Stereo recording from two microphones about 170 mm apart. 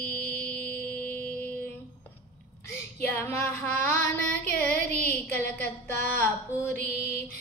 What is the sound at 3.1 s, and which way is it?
Music, 10° left (ahead or behind).